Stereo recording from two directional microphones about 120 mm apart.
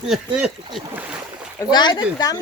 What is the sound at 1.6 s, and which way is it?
Speech, 40° left (ahead or behind).